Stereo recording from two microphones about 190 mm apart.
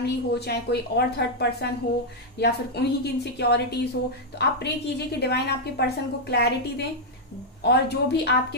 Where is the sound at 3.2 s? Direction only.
60° left (ahead or behind).